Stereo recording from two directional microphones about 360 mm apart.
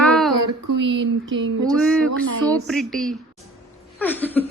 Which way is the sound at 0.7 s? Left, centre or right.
Right.